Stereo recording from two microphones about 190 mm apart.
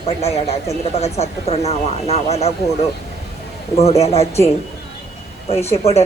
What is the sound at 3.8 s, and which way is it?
Speech, 35° left (ahead or behind).